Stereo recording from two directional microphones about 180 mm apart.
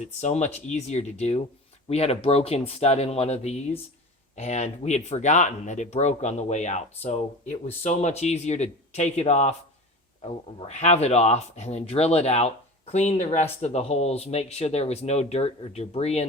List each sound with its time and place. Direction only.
0.0 s speech: 40° left (ahead or behind)